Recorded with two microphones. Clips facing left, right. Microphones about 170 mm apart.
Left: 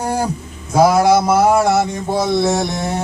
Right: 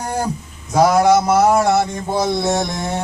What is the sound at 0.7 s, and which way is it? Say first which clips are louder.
A man's voice: left 1 dB; 5° left (ahead or behind).